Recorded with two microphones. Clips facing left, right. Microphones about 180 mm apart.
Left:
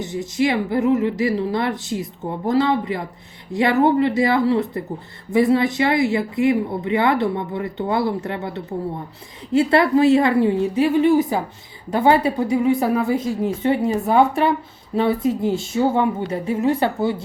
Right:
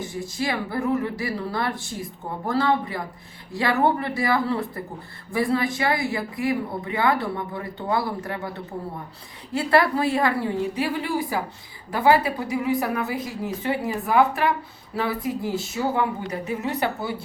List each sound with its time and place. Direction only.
0.0 s speech: 20° left (ahead or behind)